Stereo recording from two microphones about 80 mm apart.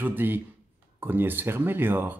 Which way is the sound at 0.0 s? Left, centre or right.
Right.